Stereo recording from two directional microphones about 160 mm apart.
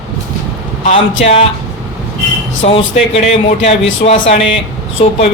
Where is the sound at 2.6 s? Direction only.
40° left (ahead or behind).